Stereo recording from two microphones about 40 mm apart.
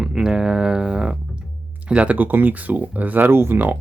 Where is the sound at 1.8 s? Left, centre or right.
Right.